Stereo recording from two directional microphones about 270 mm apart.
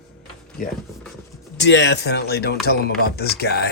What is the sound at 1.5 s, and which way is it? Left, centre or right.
Speech, left.